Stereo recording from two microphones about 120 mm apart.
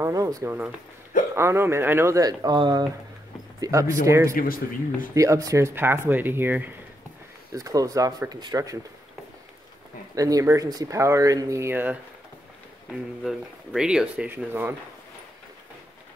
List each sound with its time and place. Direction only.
0.0 s a sound: 30° right (ahead or behind)
0.5 s speech: 10° right (ahead or behind); by 2.9 s 35° right (ahead or behind)
3.6 s speech: 25° right (ahead or behind)
7.5 s speech: 30° right (ahead or behind)
10.1 s speech: 30° right (ahead or behind)
13.2 s speech: 5° right (ahead or behind)